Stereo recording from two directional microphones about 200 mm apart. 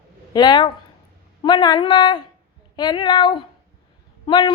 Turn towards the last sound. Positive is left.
turn(degrees=20)  # may be behind; listen again after turning